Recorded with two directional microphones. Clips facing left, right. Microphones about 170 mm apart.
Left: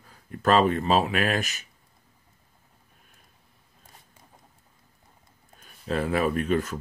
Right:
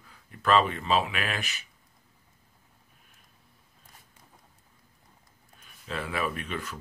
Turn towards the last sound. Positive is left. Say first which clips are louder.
# left 10 dB
turn(degrees=45)  # may be behind; listen again after turning